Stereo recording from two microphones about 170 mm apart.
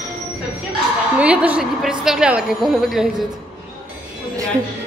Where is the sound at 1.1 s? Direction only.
10° right (ahead or behind).